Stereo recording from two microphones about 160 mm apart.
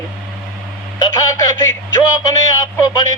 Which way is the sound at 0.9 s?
25° left (ahead or behind).